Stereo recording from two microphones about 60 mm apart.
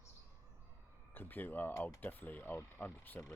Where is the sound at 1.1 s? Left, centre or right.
Left.